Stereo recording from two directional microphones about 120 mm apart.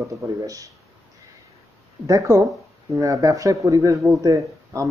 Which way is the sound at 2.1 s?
25° right (ahead or behind).